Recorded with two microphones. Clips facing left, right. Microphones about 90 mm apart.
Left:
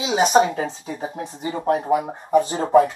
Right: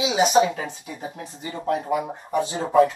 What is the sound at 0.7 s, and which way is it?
Speech, 25° left (ahead or behind).